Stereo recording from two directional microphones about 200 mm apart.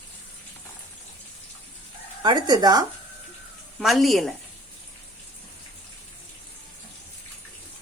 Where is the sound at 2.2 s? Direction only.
20° right (ahead or behind).